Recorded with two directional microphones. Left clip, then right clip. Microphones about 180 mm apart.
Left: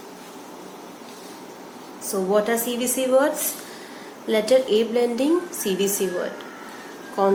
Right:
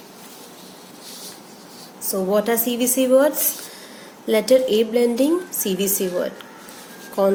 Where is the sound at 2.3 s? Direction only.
55° right (ahead or behind).